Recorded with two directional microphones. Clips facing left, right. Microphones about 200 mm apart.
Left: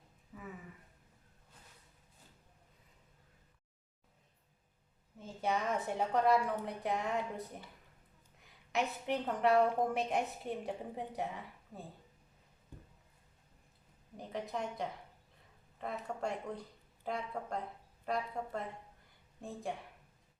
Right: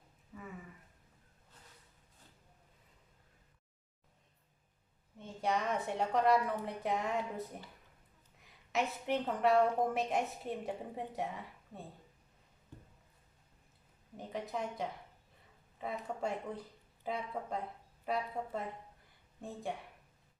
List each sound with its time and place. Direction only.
0.3 s a sound: centre (ahead or behind)
5.1 s a woman's voice: centre (ahead or behind)
14.2 s a woman's voice: centre (ahead or behind)